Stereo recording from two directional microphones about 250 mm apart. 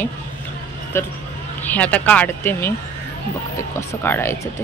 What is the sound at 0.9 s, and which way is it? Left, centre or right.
Speech, centre.